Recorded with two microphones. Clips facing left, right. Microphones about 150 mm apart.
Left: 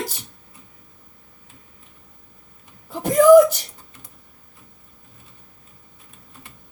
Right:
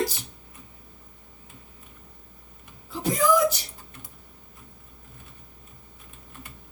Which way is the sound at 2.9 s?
55° left (ahead or behind).